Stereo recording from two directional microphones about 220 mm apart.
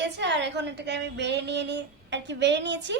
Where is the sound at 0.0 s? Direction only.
50° right (ahead or behind).